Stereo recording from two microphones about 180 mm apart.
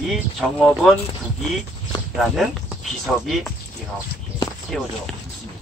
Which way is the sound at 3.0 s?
Centre (ahead or behind).